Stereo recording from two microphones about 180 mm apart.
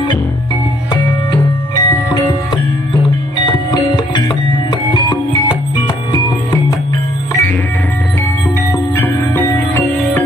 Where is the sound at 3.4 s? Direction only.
25° left (ahead or behind).